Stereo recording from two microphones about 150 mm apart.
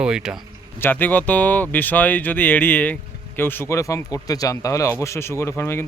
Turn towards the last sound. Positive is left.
turn(degrees=15)  # may be behind; listen again after turning